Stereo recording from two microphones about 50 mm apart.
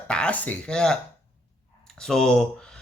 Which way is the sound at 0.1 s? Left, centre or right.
Centre.